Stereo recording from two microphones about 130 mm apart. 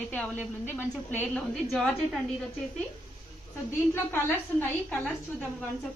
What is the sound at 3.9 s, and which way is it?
A woman's voice, 15° left (ahead or behind).